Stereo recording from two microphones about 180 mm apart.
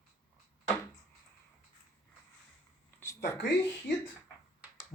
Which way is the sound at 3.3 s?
70° left (ahead or behind).